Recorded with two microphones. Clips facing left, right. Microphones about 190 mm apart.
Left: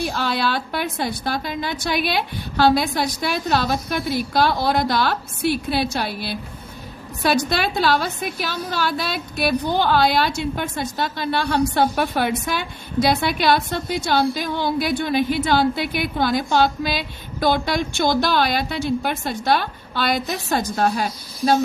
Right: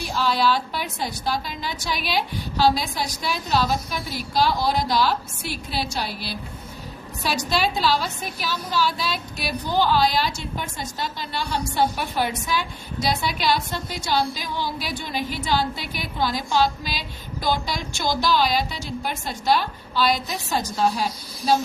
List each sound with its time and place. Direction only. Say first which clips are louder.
0.0 s a woman's voice: even; 60° left (ahead or behind)